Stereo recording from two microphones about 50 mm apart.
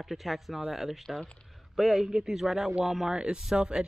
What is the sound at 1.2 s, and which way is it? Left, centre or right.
Speech, left.